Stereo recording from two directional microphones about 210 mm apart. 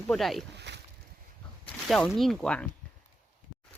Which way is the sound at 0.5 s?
55° right (ahead or behind).